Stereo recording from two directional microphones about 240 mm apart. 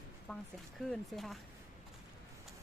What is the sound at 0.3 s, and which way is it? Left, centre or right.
Speech, centre.